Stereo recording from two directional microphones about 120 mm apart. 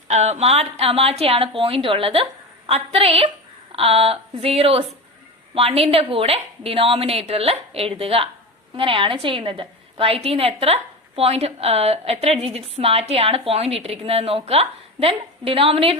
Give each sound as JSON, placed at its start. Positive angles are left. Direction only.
{"t": 0.1, "sound": "a woman's voice", "side_deg": -65}